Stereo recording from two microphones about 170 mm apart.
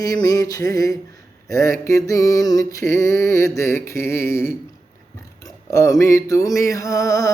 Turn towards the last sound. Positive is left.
turn(degrees=20)  # may be behind; listen again after turning